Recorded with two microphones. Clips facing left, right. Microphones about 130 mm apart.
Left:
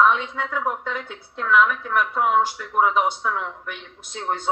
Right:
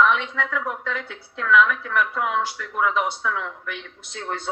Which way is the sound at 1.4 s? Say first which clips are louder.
Even; 45° left (ahead or behind).